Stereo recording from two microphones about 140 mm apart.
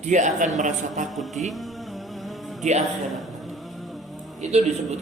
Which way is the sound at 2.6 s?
55° right (ahead or behind).